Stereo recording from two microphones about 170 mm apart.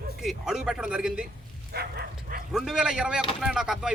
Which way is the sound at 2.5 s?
5° right (ahead or behind).